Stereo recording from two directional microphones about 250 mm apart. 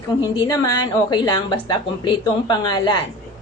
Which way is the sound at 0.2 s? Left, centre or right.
Centre.